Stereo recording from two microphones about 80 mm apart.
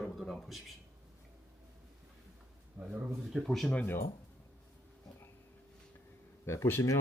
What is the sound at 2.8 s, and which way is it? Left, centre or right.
Speech, centre.